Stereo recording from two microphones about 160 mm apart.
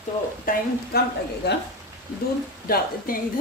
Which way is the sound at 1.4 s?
90° left.